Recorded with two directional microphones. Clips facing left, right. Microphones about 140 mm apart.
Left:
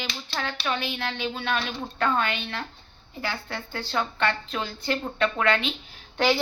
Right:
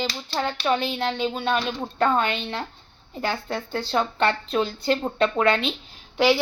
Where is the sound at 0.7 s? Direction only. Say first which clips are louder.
Right 5 dB; 35° right (ahead or behind).